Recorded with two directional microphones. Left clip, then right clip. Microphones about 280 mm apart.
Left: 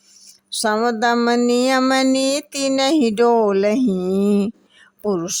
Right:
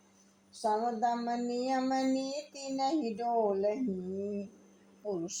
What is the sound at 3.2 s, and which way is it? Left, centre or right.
Speech, left.